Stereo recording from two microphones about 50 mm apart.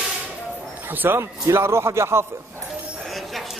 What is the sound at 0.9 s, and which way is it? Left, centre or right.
Speech, right.